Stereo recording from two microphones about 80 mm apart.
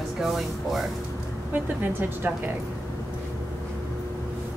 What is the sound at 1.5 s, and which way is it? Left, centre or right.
A woman's voice, right.